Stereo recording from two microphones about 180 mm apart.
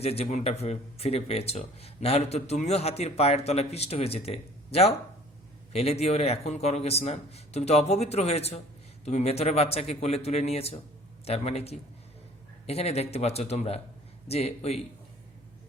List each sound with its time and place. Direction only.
0.0 s speech: 35° left (ahead or behind)